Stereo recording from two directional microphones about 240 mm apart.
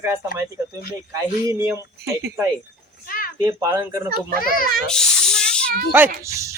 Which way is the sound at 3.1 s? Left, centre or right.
Left.